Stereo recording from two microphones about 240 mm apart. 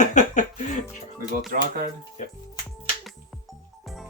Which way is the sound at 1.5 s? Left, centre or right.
Right.